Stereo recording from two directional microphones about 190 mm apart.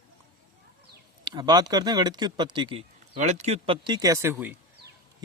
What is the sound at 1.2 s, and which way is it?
Speech, 20° right (ahead or behind).